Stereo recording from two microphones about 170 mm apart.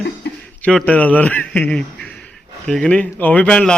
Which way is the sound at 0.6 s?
10° left (ahead or behind).